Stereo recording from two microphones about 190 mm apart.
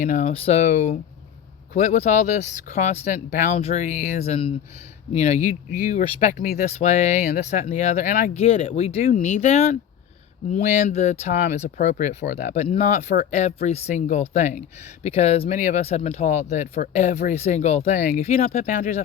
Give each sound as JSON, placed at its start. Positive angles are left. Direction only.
{"t": 0.1, "sound": "speech", "side_deg": 35}
{"t": 8.4, "sound": "speech", "side_deg": 30}
{"t": 12.2, "sound": "speech", "side_deg": 55}
{"t": 12.5, "sound": "speech", "side_deg": 35}
{"t": 12.8, "sound": "speech", "side_deg": 45}